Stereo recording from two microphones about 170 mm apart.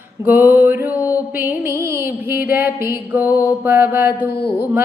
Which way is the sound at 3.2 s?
20° left (ahead or behind).